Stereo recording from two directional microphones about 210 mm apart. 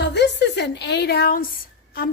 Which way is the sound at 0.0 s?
55° left (ahead or behind).